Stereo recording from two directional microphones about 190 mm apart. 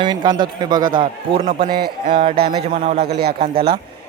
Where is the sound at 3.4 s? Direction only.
30° right (ahead or behind).